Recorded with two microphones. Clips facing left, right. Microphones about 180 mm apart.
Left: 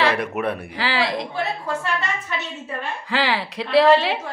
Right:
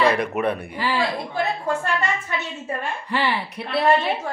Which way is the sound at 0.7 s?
90° left.